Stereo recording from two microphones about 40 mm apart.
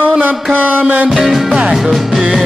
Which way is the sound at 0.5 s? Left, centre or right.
Right.